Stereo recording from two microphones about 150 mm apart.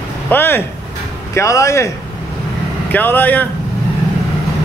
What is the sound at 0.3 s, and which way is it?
A man's voice, 15° left (ahead or behind).